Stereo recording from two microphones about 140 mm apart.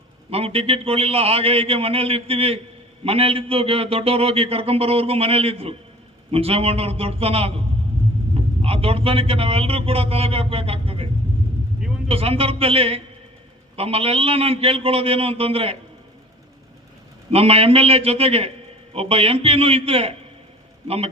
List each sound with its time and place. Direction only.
0.3 s a man's voice: 45° right (ahead or behind)
8.6 s a man's voice: 45° right (ahead or behind)
17.3 s a man's voice: 45° right (ahead or behind)